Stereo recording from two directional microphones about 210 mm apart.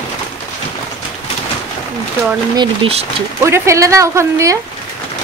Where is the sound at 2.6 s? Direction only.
30° right (ahead or behind).